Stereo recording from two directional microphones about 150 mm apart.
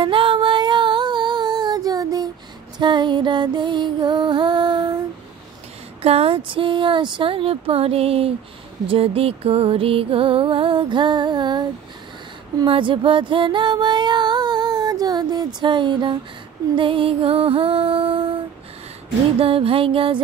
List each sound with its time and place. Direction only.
0.0 s female singing: 35° right (ahead or behind)
2.8 s music: 30° right (ahead or behind)
6.0 s music: 40° right (ahead or behind)
12.5 s female singing: 35° right (ahead or behind)
16.7 s music: 35° right (ahead or behind)
19.4 s music: 40° right (ahead or behind)